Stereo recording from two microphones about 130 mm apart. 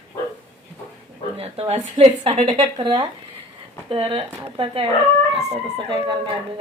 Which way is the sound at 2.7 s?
35° right (ahead or behind).